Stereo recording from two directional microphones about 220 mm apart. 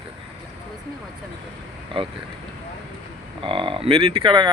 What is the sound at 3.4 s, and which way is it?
Speech, 25° right (ahead or behind).